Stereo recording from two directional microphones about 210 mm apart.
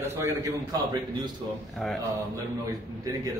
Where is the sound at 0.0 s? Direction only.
15° right (ahead or behind).